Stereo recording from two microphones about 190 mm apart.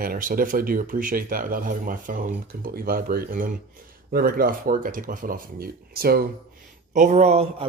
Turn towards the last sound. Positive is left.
turn(degrees=-35)  # may be behind; listen again after turning